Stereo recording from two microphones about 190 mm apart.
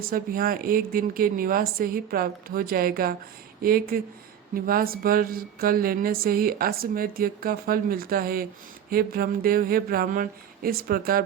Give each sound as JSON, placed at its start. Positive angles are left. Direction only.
{"t": 0.0, "sound": "mantra", "side_deg": -50}